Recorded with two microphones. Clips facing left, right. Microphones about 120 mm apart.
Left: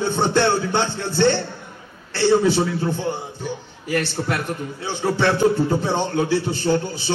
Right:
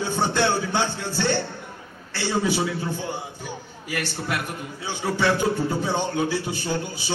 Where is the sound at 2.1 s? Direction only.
10° right (ahead or behind).